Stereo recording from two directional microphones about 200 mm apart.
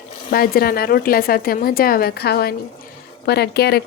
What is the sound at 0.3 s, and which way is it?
Speech, 45° left (ahead or behind).